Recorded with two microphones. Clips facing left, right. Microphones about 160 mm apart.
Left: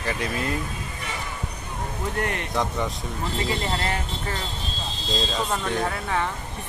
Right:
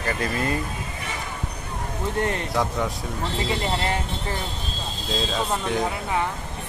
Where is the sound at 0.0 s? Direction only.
Centre (ahead or behind).